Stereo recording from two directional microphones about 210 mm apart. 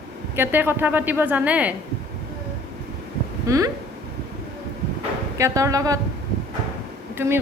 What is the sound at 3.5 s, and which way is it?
Speech, 15° right (ahead or behind).